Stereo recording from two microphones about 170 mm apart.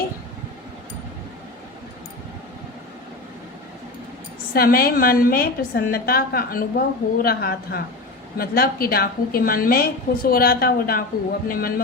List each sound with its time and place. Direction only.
4.5 s a woman's voice: 65° left (ahead or behind)